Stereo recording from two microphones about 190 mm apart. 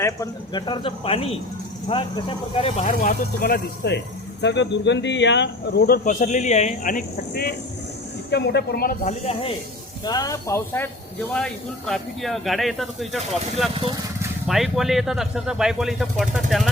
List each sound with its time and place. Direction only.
0.0 s speech: 20° left (ahead or behind); by 7.5 s 45° left (ahead or behind)
8.3 s a woman's voice: 60° left (ahead or behind)
9.0 s speech: 35° left (ahead or behind)
10.0 s speech: 20° left (ahead or behind)
11.3 s speech: 5° left (ahead or behind)